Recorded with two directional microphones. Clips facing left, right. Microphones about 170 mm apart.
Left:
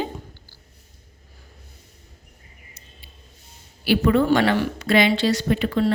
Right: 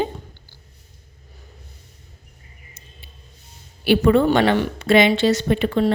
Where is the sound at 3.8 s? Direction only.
25° right (ahead or behind).